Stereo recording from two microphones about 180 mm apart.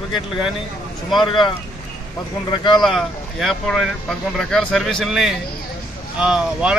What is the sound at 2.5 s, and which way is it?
Speech, 25° left (ahead or behind).